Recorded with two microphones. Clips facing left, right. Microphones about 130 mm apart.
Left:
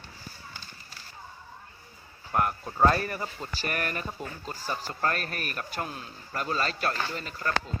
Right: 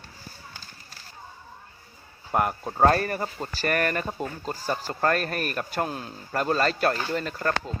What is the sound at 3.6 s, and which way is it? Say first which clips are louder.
Speech: right 7 dB; 70° right (ahead or behind).